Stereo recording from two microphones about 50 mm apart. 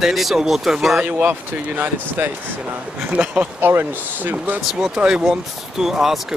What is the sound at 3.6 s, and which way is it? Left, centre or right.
Speech, right.